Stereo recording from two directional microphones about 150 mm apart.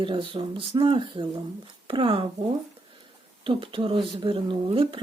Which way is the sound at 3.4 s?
35° right (ahead or behind).